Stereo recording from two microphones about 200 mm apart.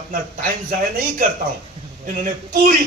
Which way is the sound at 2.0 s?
40° right (ahead or behind).